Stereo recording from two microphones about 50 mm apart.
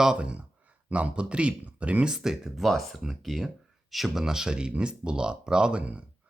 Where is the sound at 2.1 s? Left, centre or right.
Centre.